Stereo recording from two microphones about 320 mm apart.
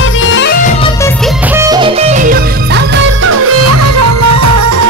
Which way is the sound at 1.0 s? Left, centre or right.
Centre.